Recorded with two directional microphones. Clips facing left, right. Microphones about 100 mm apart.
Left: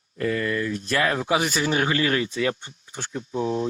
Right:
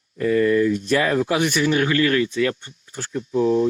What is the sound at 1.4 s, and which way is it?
Speech, 30° left (ahead or behind).